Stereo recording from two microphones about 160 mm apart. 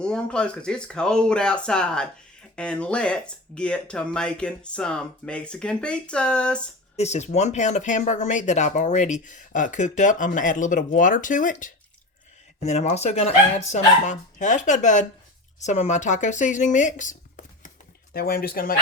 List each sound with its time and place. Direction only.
0.0 s speech: 5° left (ahead or behind)
6.9 s speech: 45° left (ahead or behind)
18.1 s speech: 70° left (ahead or behind)